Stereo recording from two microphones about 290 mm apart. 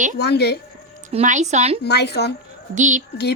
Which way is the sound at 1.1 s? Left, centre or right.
Right.